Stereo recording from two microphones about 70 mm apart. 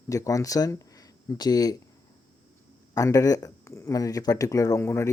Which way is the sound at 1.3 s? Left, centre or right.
Left.